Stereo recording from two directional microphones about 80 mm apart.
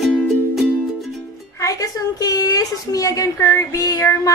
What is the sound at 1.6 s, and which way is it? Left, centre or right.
A woman's voice, left.